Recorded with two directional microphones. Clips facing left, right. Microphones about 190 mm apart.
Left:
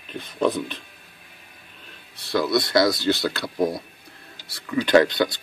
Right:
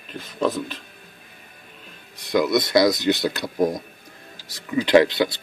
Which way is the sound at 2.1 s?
15° right (ahead or behind).